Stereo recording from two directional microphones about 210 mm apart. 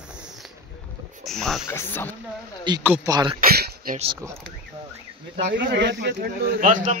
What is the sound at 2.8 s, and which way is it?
Speech, 10° right (ahead or behind).